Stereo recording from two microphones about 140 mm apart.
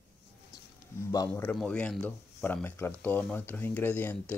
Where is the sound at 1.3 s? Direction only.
10° left (ahead or behind).